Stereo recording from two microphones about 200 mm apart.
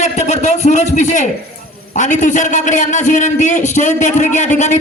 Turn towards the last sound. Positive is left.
turn(degrees=40)  # may be behind; listen again after turning